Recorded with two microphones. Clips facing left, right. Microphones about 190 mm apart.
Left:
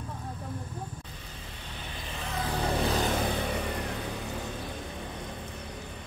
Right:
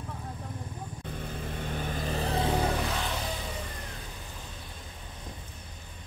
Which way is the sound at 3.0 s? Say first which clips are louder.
Left 6 dB; 55° left (ahead or behind).